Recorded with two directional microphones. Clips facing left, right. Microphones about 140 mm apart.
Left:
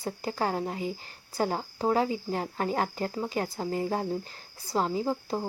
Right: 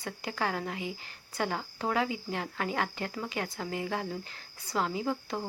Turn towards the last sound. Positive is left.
turn(degrees=35)  # may be behind; listen again after turning